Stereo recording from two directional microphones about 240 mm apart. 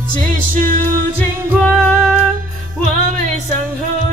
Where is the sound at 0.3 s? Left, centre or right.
Right.